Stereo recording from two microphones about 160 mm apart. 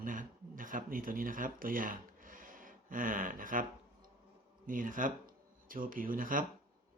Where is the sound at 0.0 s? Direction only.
55° right (ahead or behind).